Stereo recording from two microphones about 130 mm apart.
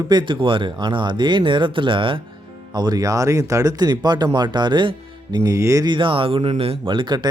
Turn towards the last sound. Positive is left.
turn(degrees=-35)  # may be behind; listen again after turning